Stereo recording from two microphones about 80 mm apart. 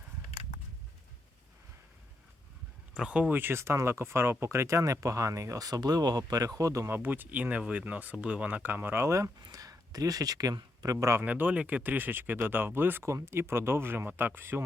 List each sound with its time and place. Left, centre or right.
2.9 s speech: centre; by 6.8 s right
6.8 s speech: right
9.4 s speech: right
11.2 s speech: right